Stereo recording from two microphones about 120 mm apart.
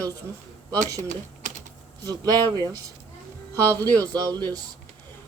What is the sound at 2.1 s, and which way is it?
Speech, 35° right (ahead or behind).